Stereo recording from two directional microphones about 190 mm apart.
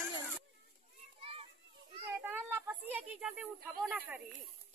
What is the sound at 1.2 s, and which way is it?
Children playing, 30° right (ahead or behind).